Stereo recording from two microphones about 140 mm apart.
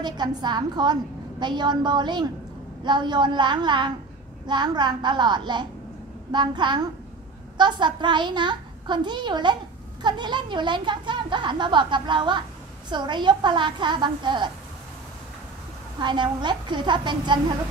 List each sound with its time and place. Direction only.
0.0 s speech: 30° right (ahead or behind)
16.0 s speech: 35° right (ahead or behind)